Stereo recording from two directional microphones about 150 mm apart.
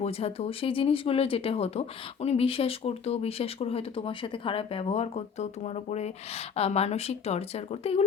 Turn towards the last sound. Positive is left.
turn(degrees=45)  # may be behind; listen again after turning